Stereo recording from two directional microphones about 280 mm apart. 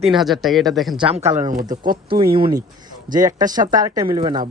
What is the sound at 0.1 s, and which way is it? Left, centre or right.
Speech, centre.